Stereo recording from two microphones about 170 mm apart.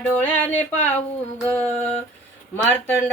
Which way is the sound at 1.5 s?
10° left (ahead or behind).